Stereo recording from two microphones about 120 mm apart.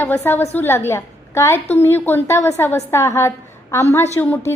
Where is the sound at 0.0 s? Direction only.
20° left (ahead or behind).